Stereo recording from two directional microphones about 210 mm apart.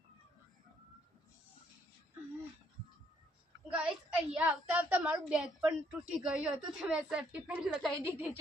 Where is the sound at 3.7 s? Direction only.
5° right (ahead or behind).